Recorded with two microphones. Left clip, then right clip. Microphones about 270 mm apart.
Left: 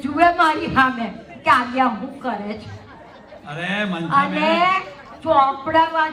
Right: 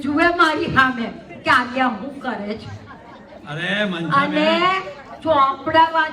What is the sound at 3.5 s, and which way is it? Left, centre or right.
A man's voice, centre.